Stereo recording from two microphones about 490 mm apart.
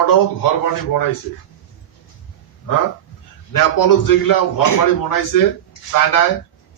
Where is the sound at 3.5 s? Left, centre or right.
Left.